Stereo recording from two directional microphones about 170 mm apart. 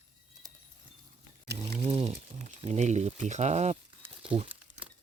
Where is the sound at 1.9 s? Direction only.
40° right (ahead or behind).